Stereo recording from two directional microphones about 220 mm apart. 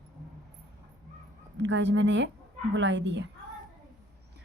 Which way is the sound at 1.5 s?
55° right (ahead or behind).